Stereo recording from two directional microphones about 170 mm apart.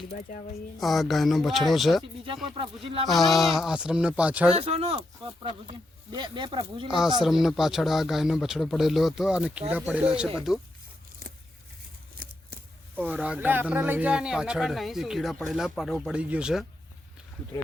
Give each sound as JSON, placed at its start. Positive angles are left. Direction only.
{"t": 0.2, "sound": "speech", "side_deg": 50}
{"t": 0.8, "sound": "speech", "side_deg": 0}
{"t": 2.2, "sound": "speech", "side_deg": -30}
{"t": 3.1, "sound": "speech", "side_deg": 0}
{"t": 4.4, "sound": "speech", "side_deg": -35}
{"t": 7.2, "sound": "speech", "side_deg": -5}
{"t": 13.0, "sound": "speech", "side_deg": -10}